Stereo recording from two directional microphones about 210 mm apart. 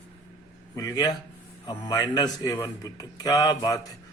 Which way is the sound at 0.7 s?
15° left (ahead or behind).